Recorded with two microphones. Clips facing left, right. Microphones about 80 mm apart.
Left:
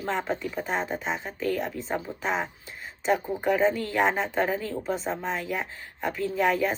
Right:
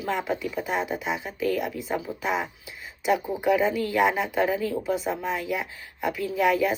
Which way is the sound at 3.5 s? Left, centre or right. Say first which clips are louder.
Right 1 dB; left.